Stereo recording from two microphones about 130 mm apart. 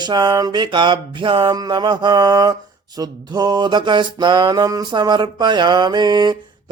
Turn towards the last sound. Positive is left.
turn(degrees=-35)  # may be behind; listen again after turning